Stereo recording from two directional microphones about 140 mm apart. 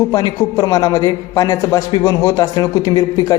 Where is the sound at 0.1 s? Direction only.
25° left (ahead or behind).